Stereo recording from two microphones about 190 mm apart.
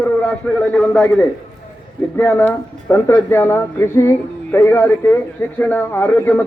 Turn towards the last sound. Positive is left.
turn(degrees=10)  # may be behind; listen again after turning